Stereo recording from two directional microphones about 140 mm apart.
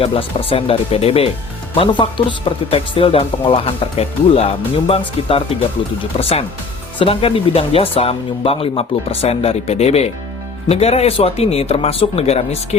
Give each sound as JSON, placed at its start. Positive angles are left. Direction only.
{"t": 0.0, "sound": "speech", "side_deg": 40}